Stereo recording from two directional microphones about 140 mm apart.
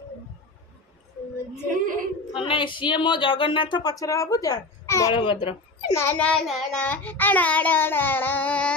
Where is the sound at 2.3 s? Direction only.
40° left (ahead or behind); by 5.1 s 20° left (ahead or behind).